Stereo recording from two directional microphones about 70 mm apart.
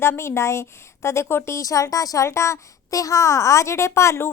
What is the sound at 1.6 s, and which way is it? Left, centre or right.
Speech, left.